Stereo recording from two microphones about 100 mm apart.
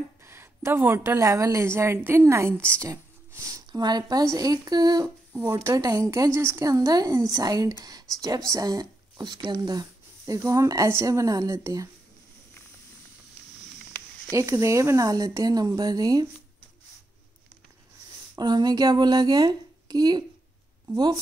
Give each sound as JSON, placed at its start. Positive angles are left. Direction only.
{"t": 0.2, "sound": "a woman's voice", "side_deg": -25}
{"t": 2.5, "sound": "a woman's voice", "side_deg": 10}
{"t": 2.8, "sound": "a sound", "side_deg": -30}
{"t": 3.8, "sound": "speech", "side_deg": -40}
{"t": 5.3, "sound": "a woman's voice", "side_deg": -25}
{"t": 14.3, "sound": "speech", "side_deg": -30}
{"t": 18.4, "sound": "speech", "side_deg": -45}